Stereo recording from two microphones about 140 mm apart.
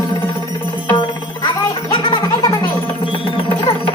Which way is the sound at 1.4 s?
30° left (ahead or behind).